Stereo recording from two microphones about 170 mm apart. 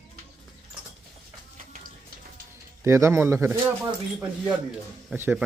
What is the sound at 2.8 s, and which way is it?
Speech, 15° right (ahead or behind).